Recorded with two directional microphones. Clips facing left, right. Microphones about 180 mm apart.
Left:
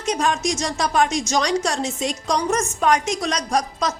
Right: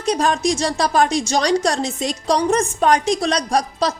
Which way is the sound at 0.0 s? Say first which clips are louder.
Right 3 dB; 35° right (ahead or behind).